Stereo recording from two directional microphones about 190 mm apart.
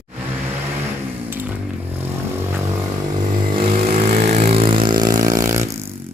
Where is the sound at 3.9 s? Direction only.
35° right (ahead or behind); by 5.9 s 15° right (ahead or behind).